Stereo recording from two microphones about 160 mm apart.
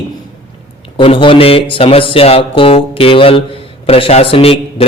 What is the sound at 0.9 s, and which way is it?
A man's voice, 35° left (ahead or behind).